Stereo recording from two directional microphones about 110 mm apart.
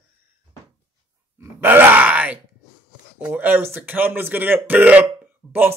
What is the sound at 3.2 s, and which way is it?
Speech, 15° right (ahead or behind).